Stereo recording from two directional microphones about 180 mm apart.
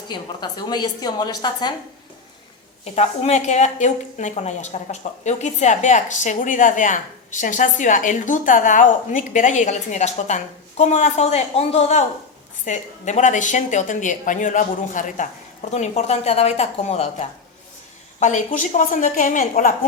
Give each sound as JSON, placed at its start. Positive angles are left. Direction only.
{"t": 0.1, "sound": "a woman's voice", "side_deg": 25}
{"t": 2.8, "sound": "a woman's voice", "side_deg": 35}